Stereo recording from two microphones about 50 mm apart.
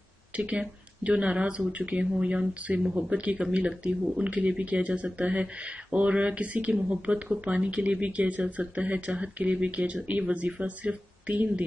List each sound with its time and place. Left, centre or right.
0.4 s speech: right